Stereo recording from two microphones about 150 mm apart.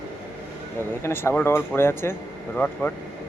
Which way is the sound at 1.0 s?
15° left (ahead or behind).